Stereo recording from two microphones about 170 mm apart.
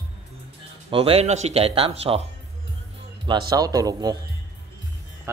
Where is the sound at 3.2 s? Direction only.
25° right (ahead or behind).